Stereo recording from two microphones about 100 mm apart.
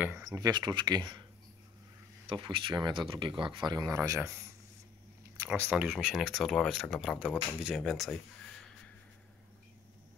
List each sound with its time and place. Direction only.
0.2 s speech: 40° right (ahead or behind)
2.2 s speech: 55° right (ahead or behind); by 4.4 s 30° right (ahead or behind)
5.5 s speech: 15° right (ahead or behind); by 8.2 s centre (ahead or behind)